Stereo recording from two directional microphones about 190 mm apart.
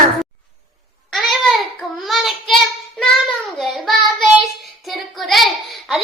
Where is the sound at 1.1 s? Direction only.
Centre (ahead or behind).